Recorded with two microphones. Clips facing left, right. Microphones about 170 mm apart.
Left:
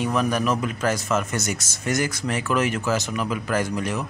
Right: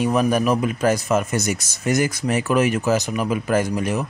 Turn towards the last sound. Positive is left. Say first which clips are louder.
# right 4 dB
turn(degrees=-20)  # may be behind; listen again after turning